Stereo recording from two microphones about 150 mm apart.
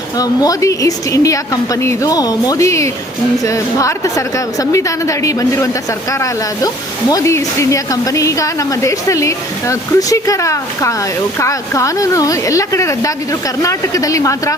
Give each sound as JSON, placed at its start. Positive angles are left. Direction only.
{"t": 0.2, "sound": "speech", "side_deg": 25}